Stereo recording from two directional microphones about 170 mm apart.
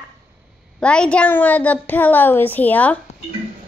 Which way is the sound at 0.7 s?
5° left (ahead or behind).